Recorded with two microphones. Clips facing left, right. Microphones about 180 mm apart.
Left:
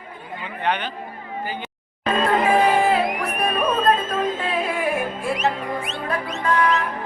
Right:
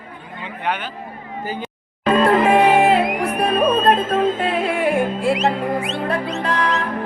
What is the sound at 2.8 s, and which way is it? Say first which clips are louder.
Music: right 4 dB; 25° right (ahead or behind).